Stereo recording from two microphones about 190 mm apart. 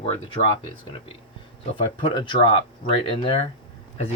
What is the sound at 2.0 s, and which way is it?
Speech, 25° left (ahead or behind).